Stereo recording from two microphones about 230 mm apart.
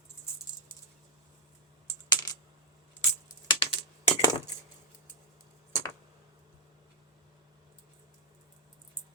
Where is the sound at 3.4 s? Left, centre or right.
Left.